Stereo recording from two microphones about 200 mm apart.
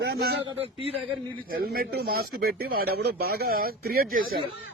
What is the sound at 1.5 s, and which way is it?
Speech, 50° right (ahead or behind).